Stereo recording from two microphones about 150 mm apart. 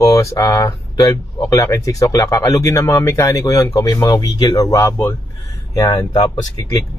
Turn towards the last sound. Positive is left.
turn(degrees=25)  # may be behind; listen again after turning